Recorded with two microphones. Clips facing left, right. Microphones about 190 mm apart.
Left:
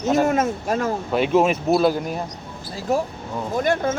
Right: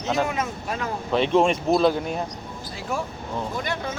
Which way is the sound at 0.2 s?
45° left (ahead or behind).